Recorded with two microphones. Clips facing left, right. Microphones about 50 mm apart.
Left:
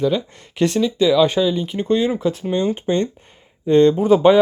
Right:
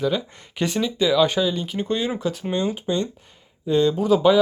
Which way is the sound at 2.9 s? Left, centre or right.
Left.